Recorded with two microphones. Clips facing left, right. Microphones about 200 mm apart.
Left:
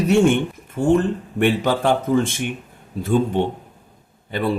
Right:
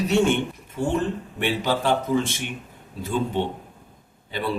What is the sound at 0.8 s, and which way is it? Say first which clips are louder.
Speech: left 7 dB; 50° left (ahead or behind).